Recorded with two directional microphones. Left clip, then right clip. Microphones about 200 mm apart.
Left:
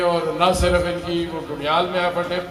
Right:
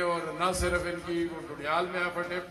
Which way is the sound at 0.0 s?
25° right (ahead or behind).